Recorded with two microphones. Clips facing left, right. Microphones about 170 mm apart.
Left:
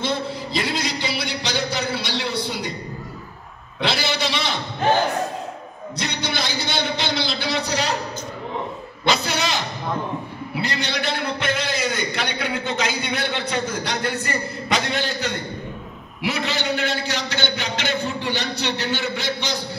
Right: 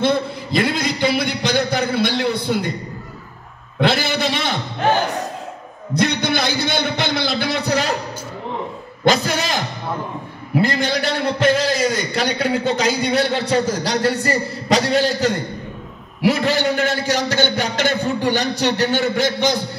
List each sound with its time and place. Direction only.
0.0 s a man's voice: 55° right (ahead or behind)
3.8 s a man's voice: 50° right (ahead or behind)
5.9 s a man's voice: 55° right (ahead or behind)
9.0 s a man's voice: 45° right (ahead or behind)